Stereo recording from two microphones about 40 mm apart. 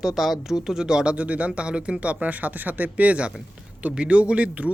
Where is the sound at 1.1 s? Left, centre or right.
Right.